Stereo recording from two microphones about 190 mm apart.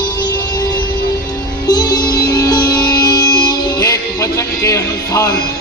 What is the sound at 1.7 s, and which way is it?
Music, 20° left (ahead or behind).